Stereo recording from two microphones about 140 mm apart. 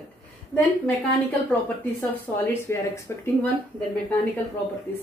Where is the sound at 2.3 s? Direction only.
10° left (ahead or behind).